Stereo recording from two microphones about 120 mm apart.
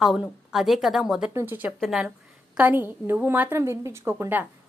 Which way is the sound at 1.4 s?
15° right (ahead or behind).